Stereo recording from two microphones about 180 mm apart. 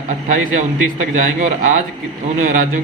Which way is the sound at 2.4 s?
45° right (ahead or behind).